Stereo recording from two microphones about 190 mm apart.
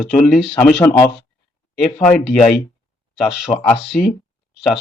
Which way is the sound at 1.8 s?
5° left (ahead or behind).